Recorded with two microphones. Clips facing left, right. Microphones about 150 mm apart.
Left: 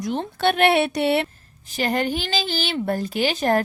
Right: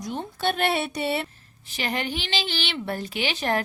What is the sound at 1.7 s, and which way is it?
Speech, 45° left (ahead or behind).